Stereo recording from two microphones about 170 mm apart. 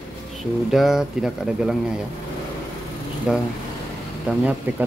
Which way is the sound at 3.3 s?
5° right (ahead or behind).